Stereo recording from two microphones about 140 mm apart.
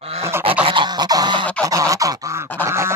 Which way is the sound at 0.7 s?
35° right (ahead or behind).